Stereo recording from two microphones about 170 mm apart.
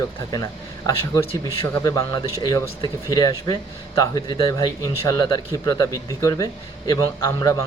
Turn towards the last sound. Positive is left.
turn(degrees=20)  # may be behind; listen again after turning